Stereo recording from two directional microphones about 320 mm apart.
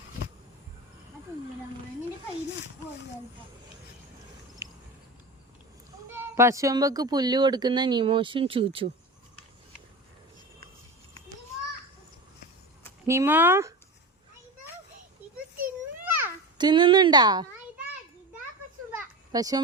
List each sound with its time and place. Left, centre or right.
4.6 s a sound: centre
6.3 s speech: centre
13.1 s speech: centre
15.5 s children playing: right
16.6 s a child's voice: centre
18.9 s children playing: centre